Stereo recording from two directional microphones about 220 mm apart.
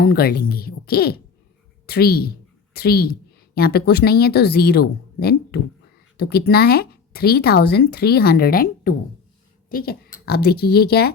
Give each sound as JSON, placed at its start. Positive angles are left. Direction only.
{"t": 0.0, "sound": "a woman's voice", "side_deg": 45}